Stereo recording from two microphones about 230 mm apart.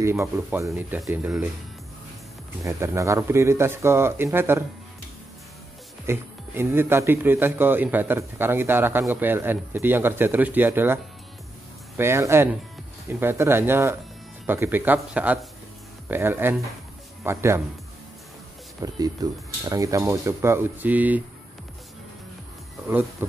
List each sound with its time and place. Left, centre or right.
0.0 s a man's voice: centre
2.6 s a man's voice: centre
6.0 s a man's voice: centre
12.0 s a man's voice: centre
18.8 s a man's voice: centre